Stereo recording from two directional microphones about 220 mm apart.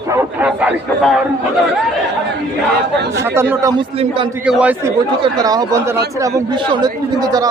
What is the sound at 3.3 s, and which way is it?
A man's voice, 10° right (ahead or behind).